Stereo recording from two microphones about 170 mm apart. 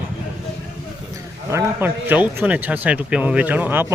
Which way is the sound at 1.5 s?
15° right (ahead or behind).